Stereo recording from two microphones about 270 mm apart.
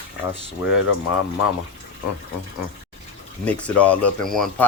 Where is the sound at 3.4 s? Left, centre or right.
Centre.